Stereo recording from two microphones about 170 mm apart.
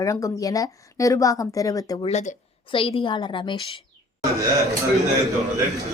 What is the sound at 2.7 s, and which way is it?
Speech, 30° left (ahead or behind).